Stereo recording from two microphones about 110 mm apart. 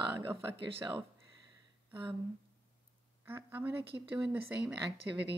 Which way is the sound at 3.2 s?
20° right (ahead or behind).